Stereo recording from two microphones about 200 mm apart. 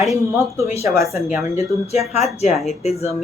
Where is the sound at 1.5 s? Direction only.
30° left (ahead or behind).